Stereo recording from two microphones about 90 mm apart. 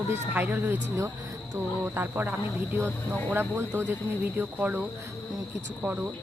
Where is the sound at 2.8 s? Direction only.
15° left (ahead or behind).